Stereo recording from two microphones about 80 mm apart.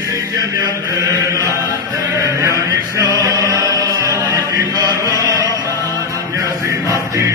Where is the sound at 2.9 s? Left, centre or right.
Right.